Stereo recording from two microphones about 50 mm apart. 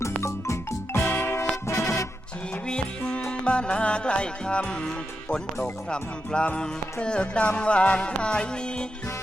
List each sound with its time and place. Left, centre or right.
0.2 s music: left
1.0 s music: left
1.6 s music: left
2.6 s music: centre